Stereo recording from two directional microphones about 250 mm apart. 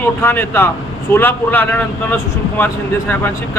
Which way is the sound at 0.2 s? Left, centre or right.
Centre.